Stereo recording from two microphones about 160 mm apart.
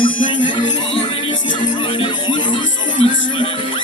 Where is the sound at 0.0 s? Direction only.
30° left (ahead or behind).